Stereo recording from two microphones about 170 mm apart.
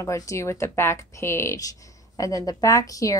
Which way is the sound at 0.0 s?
15° left (ahead or behind).